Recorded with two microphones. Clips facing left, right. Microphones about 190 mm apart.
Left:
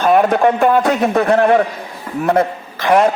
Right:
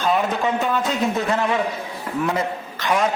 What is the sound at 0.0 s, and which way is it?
Speech, 60° left (ahead or behind).